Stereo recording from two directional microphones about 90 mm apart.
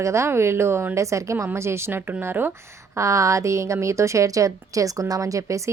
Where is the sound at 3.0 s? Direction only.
35° right (ahead or behind).